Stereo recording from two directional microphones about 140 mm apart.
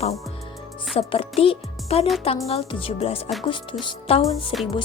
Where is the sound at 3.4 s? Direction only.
35° left (ahead or behind).